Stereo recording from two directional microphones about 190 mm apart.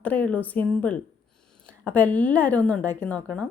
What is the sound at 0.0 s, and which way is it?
A woman's voice, 10° left (ahead or behind).